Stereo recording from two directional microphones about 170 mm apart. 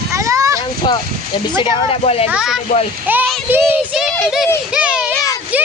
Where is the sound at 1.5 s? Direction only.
30° left (ahead or behind).